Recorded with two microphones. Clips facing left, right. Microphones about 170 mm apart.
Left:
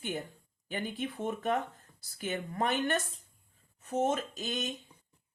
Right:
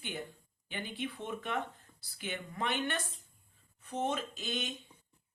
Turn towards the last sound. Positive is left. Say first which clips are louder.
# left 3 dB
turn(degrees=40)  # may be behind; listen again after turning